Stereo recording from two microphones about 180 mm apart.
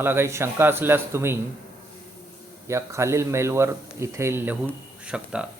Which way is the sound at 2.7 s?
15° right (ahead or behind).